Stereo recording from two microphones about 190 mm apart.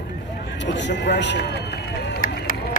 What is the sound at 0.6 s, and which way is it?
Run, 70° left (ahead or behind).